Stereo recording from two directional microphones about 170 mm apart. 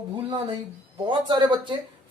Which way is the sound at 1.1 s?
25° right (ahead or behind).